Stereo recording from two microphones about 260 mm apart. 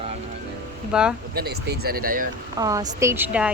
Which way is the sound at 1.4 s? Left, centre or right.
Right.